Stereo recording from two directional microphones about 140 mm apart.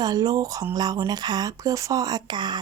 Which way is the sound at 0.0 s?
25° right (ahead or behind).